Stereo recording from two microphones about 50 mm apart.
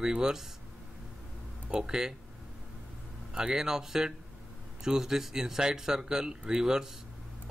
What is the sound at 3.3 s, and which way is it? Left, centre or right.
Speech, centre.